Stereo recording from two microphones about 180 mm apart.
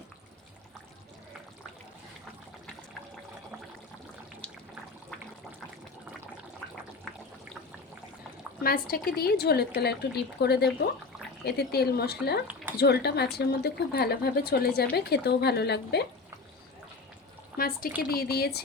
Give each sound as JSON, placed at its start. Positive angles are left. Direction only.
{"t": 8.6, "sound": "speech", "side_deg": 55}
{"t": 17.6, "sound": "speech", "side_deg": 55}